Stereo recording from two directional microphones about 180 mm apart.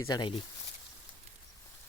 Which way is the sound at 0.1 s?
25° left (ahead or behind).